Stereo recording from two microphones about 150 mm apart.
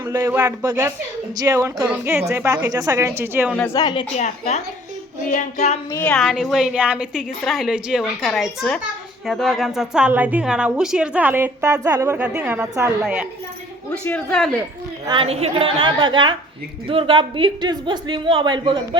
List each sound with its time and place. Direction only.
0.1 s a woman's voice: 15° right (ahead or behind)
3.7 s a woman's voice: 30° left (ahead or behind)
4.1 s a woman's voice: 50° left (ahead or behind)
5.9 s a woman's voice: 15° left (ahead or behind)
6.1 s a woman's voice: centre (ahead or behind)
13.9 s a woman's voice: 10° left (ahead or behind)
15.0 s a woman's voice: 35° right (ahead or behind)